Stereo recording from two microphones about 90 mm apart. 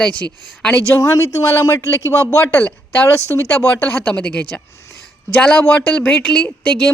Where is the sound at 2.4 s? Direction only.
15° left (ahead or behind).